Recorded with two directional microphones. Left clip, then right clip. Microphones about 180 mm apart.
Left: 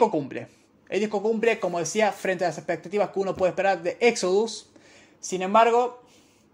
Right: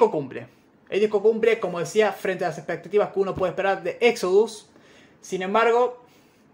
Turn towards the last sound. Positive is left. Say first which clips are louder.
# even
turn(degrees=30)  # may be behind; listen again after turning